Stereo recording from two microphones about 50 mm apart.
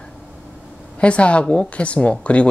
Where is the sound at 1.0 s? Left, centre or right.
Left.